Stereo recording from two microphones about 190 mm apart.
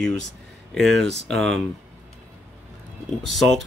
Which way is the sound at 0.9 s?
65° right (ahead or behind).